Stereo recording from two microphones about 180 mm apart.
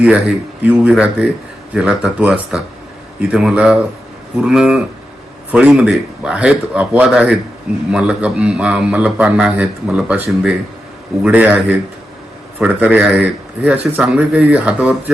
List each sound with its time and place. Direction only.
0.6 s a man's voice: 5° right (ahead or behind)